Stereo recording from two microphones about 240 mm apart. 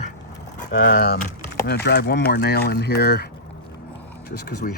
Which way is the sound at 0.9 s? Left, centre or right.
Left.